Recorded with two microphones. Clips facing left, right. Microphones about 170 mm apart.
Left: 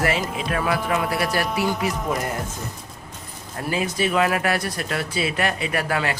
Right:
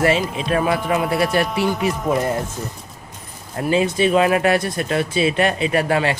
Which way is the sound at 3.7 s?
25° right (ahead or behind).